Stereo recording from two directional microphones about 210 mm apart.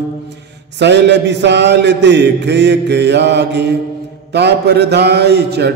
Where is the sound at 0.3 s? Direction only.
55° right (ahead or behind).